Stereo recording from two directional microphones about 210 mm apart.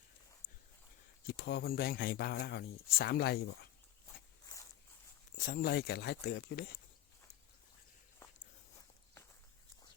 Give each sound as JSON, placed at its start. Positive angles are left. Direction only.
{"t": 0.4, "sound": "a sound", "side_deg": 25}
{"t": 1.3, "sound": "speech", "side_deg": 55}
{"t": 5.5, "sound": "speech", "side_deg": 45}